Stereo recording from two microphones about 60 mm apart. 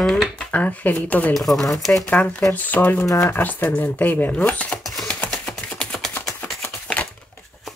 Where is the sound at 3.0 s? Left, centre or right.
Left.